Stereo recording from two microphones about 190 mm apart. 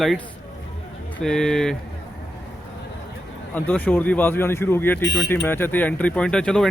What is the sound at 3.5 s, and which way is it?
Speech, 10° left (ahead or behind).